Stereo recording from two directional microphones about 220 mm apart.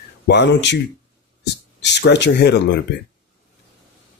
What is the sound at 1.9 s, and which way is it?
Speech, 50° left (ahead or behind).